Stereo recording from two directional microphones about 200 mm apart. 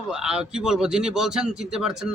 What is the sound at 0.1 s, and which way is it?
A man's voice, 5° right (ahead or behind).